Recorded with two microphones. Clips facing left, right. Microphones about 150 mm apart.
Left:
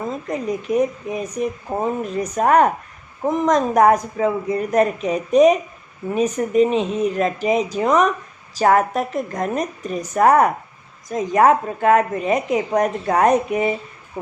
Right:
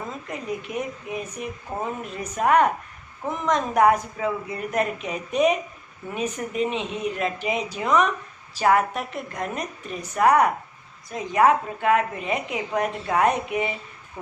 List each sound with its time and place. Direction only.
0.3 s a woman's voice: 40° left (ahead or behind)